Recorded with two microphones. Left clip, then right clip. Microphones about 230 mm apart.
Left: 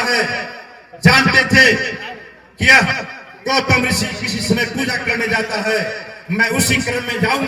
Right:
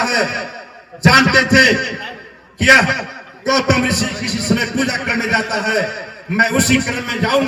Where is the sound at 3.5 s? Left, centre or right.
Right.